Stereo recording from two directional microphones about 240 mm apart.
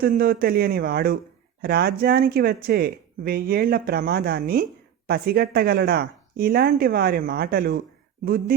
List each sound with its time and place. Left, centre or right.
0.0 s speech: right